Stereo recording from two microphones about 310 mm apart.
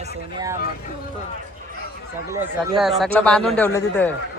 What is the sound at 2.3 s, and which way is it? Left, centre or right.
Speech, centre.